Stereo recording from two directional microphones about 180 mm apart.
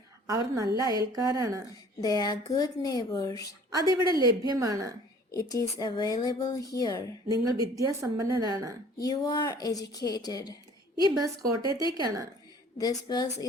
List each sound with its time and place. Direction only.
0.3 s a woman's voice: 20° right (ahead or behind)
1.7 s a woman's voice: 20° left (ahead or behind)
3.7 s a woman's voice: 20° right (ahead or behind)
5.3 s speech: 20° left (ahead or behind)
7.3 s a woman's voice: 20° right (ahead or behind)
9.0 s speech: 20° left (ahead or behind)
11.1 s a woman's voice: 20° right (ahead or behind)
11.6 s speech: 25° left (ahead or behind)
11.9 s a woman's voice: 20° right (ahead or behind)
12.7 s speech: 20° left (ahead or behind)